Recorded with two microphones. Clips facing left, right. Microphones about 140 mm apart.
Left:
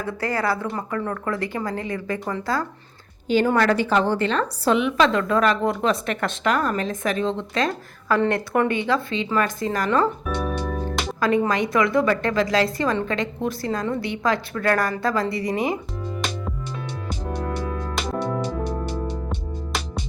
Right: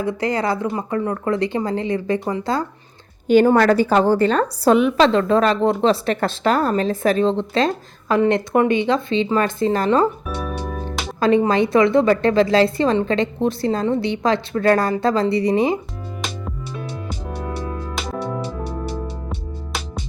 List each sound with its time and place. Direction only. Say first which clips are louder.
0.0 s a woman's voice: right 4 dB; 20° right (ahead or behind)
3.4 s a woman's voice: right 5 dB; 35° right (ahead or behind)
10.6 s music: left 1 dB; 15° right (ahead or behind)
11.2 s a woman's voice: right 5 dB; 25° right (ahead or behind)
17.2 s music: left 1 dB; 10° right (ahead or behind)